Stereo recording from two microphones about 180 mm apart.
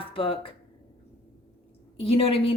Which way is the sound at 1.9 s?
30° left (ahead or behind).